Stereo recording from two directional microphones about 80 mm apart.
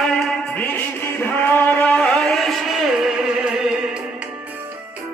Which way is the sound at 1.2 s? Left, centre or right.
Left.